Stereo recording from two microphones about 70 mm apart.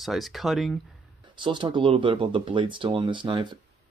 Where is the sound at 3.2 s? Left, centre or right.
Right.